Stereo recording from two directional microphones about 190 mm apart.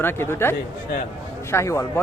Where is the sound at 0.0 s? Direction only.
10° left (ahead or behind).